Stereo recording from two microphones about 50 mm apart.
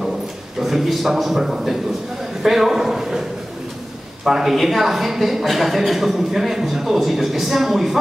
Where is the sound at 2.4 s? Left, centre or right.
Centre.